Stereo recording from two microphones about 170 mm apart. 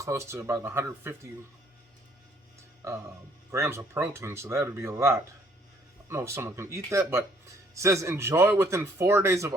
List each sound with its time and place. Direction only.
0.0 s speech: 15° right (ahead or behind)
2.8 s speech: 15° right (ahead or behind)